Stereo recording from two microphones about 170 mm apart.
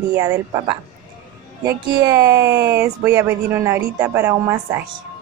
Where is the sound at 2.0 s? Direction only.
15° right (ahead or behind).